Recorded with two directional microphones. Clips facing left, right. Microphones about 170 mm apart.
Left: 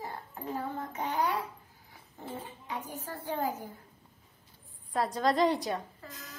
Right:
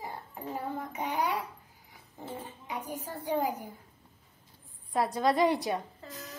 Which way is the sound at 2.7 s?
15° right (ahead or behind).